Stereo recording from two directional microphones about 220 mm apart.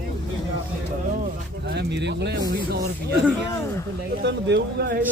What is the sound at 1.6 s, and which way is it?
Speech, 50° right (ahead or behind).